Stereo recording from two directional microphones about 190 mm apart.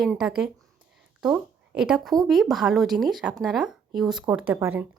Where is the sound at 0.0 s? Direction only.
Centre (ahead or behind).